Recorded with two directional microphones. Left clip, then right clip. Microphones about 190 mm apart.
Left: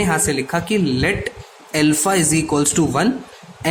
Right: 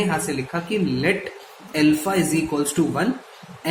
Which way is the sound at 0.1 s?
55° left (ahead or behind).